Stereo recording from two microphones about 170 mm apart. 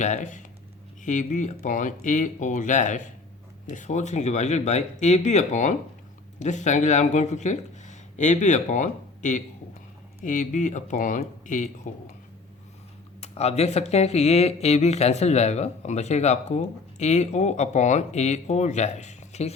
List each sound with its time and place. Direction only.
0.0 s speech: 45° left (ahead or behind)
13.1 s speech: 40° left (ahead or behind)